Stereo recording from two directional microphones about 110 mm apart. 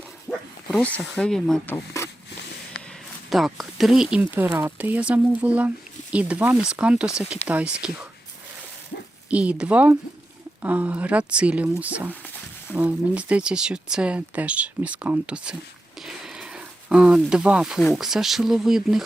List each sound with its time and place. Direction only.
0.3 s speech: 5° left (ahead or behind)
1.6 s speech: 25° left (ahead or behind)
3.2 s speech: centre (ahead or behind)
9.3 s speech: 10° right (ahead or behind)